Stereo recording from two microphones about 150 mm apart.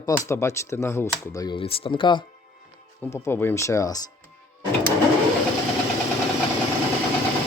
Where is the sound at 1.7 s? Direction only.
35° left (ahead or behind).